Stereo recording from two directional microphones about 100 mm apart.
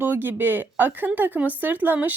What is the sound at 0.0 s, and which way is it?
A woman's voice, 20° right (ahead or behind).